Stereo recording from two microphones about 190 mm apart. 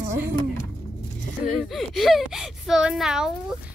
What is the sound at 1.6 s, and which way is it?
Speech, centre (ahead or behind).